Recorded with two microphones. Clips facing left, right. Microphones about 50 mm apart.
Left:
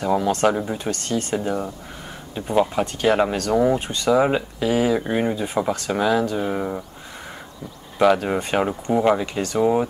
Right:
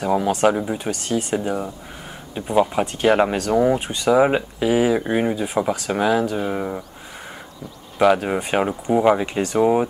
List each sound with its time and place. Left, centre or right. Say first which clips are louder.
0.0 s speech: right 1 dB; centre
8.0 s speech: right 1 dB; centre
9.2 s speech: right 2 dB; centre